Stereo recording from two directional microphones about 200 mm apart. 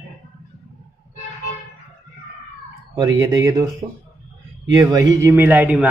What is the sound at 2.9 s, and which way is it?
A man's voice, 20° right (ahead or behind).